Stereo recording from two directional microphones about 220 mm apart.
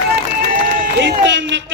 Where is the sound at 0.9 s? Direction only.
55° right (ahead or behind).